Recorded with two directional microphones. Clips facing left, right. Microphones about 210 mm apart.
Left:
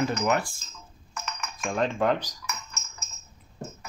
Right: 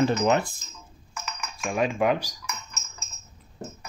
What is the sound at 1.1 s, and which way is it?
Dishes, 5° right (ahead or behind).